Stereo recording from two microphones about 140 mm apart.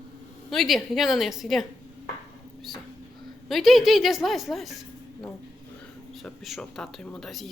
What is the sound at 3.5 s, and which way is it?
A woman's voice, centre (ahead or behind).